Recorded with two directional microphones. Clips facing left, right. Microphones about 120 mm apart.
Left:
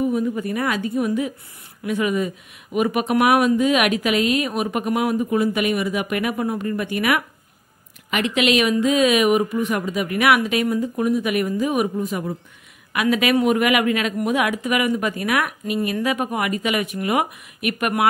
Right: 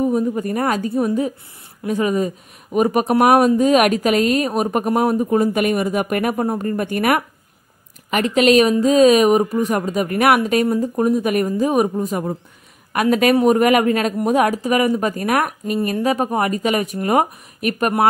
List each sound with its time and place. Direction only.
0.0 s speech: 35° right (ahead or behind)